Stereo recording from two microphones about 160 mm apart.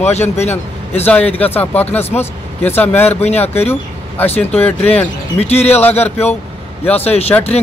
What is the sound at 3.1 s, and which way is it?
Speech, 40° left (ahead or behind).